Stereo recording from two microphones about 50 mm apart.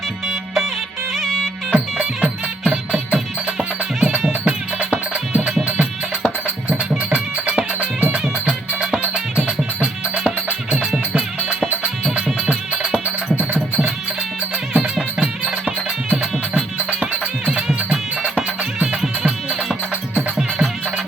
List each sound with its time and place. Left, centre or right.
1.1 s music: centre
1.7 s music: centre
14.9 s music: centre